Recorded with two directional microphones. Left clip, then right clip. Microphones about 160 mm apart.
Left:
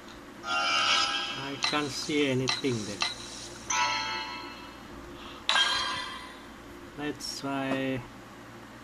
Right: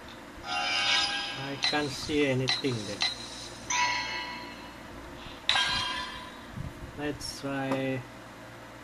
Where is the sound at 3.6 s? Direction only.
40° left (ahead or behind).